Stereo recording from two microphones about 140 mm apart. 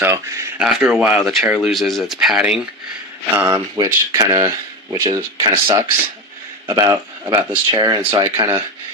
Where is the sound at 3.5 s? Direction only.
25° right (ahead or behind).